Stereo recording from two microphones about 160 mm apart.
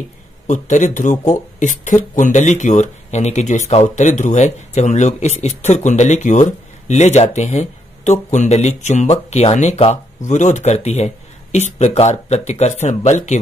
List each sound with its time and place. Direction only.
0.5 s speech: 50° left (ahead or behind)